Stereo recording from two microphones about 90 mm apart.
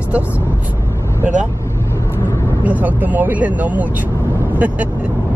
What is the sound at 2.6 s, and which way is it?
Speech, 20° right (ahead or behind).